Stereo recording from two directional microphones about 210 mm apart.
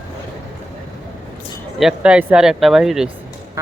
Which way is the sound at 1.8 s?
5° right (ahead or behind).